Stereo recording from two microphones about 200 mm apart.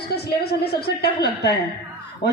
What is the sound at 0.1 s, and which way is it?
A woman's voice, 50° left (ahead or behind).